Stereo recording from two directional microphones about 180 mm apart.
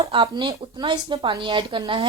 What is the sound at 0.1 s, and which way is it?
Speech, 25° right (ahead or behind).